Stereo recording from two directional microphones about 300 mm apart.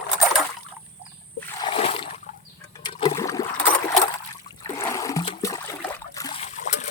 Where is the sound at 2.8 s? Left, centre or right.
Centre.